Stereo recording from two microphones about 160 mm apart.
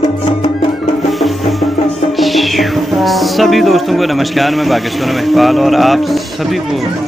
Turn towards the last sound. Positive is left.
turn(degrees=0)  # may be behind; listen again after turning